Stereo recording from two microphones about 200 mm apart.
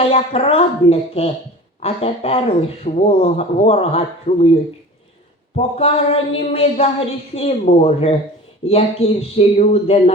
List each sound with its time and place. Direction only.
0.0 s speech: 30° left (ahead or behind)
5.5 s speech: 30° left (ahead or behind)